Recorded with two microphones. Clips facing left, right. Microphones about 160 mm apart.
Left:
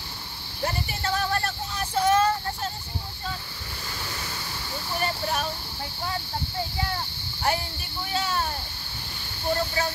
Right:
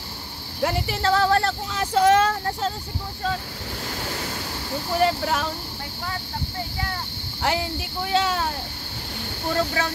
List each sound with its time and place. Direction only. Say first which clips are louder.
0.6 s speech: right 6 dB; 90° right
4.0 s waves: right 5 dB; 60° right (ahead or behind)
5.0 s speech: right 6 dB; 90° right
7.4 s speech: right 3 dB; 90° right
9.5 s speech: right 2 dB; 80° right